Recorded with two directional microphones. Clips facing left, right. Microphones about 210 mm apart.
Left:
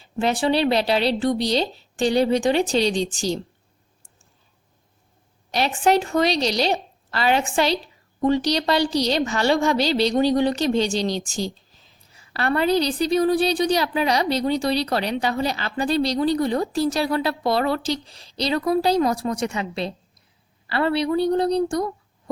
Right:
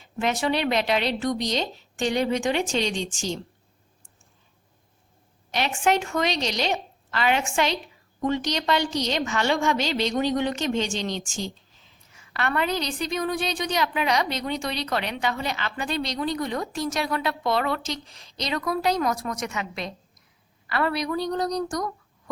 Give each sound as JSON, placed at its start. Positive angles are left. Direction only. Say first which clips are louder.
{"t": 0.0, "sound": "a woman's voice", "louder": "left 4 dB", "side_deg": 30}
{"t": 5.5, "sound": "a woman's voice", "louder": "left 4 dB", "side_deg": 35}